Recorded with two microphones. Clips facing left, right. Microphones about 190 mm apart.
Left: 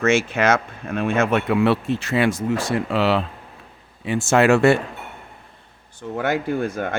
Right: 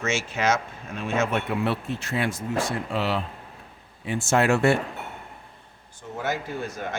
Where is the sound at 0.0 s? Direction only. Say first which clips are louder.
Left 7 dB; 60° left (ahead or behind); by 4.8 s 85° left.